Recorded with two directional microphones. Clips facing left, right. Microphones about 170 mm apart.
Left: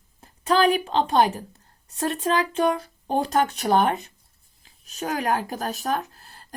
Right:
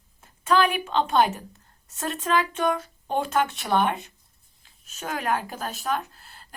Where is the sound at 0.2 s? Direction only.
35° left (ahead or behind).